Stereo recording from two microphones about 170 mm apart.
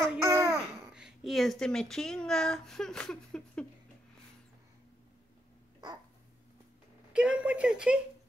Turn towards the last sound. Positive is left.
turn(degrees=-5)  # may be behind; listen again after turning